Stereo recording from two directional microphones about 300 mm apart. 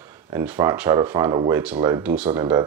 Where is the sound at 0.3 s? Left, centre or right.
Centre.